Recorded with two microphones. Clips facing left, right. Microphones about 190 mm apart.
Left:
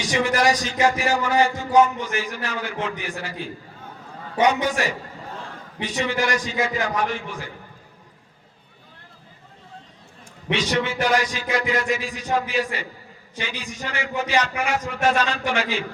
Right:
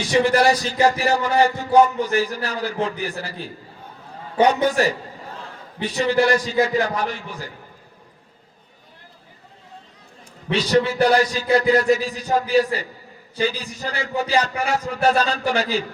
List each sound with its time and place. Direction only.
0.1 s speech: 35° right (ahead or behind)
10.5 s speech: 35° right (ahead or behind)